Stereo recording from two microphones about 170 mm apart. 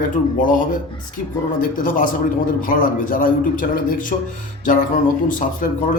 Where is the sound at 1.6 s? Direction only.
50° left (ahead or behind).